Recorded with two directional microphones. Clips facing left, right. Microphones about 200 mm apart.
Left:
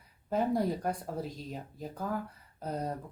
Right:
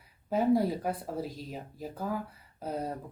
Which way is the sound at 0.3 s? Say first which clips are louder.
Right 3 dB; 5° right (ahead or behind).